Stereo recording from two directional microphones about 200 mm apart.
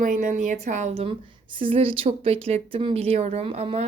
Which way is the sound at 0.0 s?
40° right (ahead or behind).